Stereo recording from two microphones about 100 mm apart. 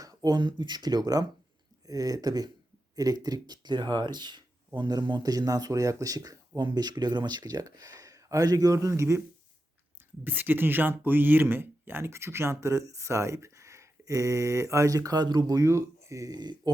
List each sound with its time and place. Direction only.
0.0 s speech: 40° right (ahead or behind)
10.2 s speech: 20° right (ahead or behind); by 16.6 s 45° right (ahead or behind)